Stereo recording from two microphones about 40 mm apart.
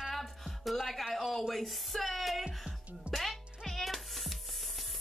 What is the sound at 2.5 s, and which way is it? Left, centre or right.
Music, centre.